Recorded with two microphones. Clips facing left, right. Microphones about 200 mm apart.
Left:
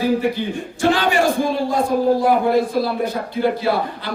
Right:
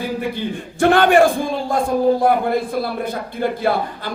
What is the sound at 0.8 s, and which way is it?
A man's voice, 55° right (ahead or behind).